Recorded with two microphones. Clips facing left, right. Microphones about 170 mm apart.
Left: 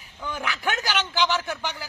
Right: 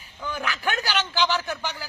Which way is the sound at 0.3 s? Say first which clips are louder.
Even; 15° left (ahead or behind).